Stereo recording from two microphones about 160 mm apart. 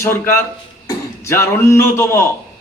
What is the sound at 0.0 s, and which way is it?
A man's voice, 15° left (ahead or behind).